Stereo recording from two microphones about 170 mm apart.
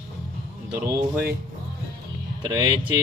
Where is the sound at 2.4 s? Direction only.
20° right (ahead or behind).